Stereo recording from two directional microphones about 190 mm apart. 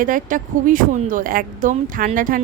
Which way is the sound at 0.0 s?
45° right (ahead or behind).